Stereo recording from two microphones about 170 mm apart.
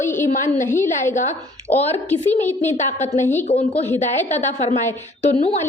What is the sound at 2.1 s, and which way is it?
Speech, 10° left (ahead or behind).